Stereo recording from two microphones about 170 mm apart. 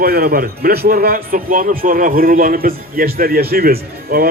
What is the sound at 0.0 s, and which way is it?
A man's voice, 65° right (ahead or behind).